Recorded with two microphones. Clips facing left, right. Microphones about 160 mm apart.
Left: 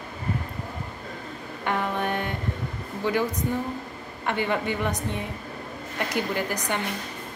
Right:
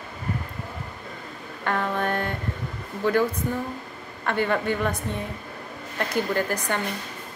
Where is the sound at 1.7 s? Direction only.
15° left (ahead or behind).